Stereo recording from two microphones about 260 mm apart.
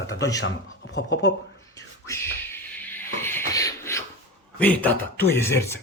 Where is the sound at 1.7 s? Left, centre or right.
Centre.